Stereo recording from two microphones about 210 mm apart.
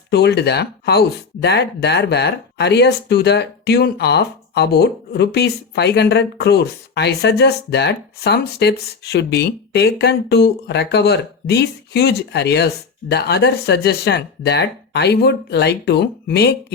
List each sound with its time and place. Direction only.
0.1 s speech: 50° left (ahead or behind)